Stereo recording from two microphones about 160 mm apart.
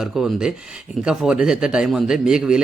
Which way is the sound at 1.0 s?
5° right (ahead or behind).